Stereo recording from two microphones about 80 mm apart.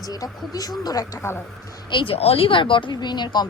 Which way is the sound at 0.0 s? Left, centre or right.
Left.